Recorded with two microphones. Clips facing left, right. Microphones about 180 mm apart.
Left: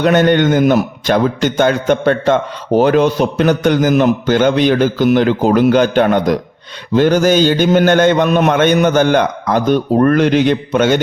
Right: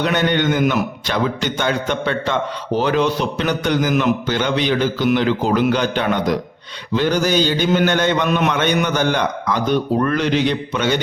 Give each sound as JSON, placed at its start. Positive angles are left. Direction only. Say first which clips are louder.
{"t": 0.0, "sound": "a man's voice", "louder": "left 7 dB", "side_deg": 45}